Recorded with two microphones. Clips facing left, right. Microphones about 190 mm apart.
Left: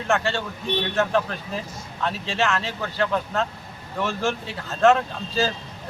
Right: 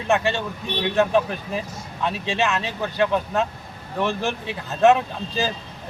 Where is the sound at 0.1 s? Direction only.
15° right (ahead or behind).